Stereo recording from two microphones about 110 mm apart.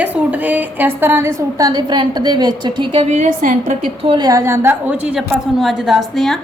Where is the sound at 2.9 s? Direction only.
90° right.